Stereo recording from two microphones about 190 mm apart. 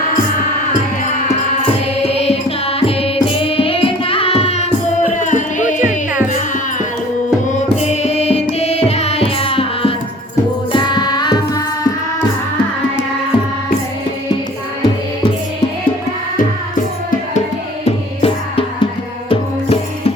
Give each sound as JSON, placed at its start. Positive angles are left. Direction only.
{"t": 2.0, "sound": "music", "side_deg": 30}
{"t": 17.8, "sound": "music", "side_deg": 35}